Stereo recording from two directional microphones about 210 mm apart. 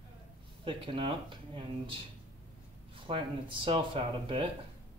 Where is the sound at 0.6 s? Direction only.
25° right (ahead or behind).